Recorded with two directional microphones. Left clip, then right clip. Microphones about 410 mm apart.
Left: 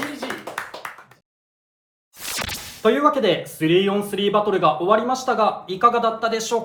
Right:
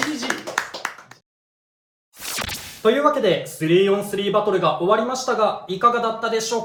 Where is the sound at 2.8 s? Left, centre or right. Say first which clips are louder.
Even; centre.